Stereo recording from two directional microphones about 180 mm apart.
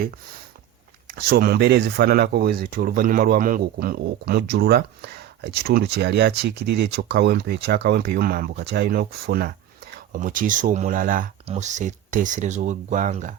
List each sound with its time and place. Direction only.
1.1 s speech: 60° right (ahead or behind); by 13.3 s 45° right (ahead or behind)